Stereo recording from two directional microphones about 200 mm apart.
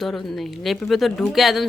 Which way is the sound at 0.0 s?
Centre (ahead or behind).